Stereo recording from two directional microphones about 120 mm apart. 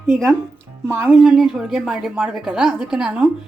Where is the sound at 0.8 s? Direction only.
20° right (ahead or behind).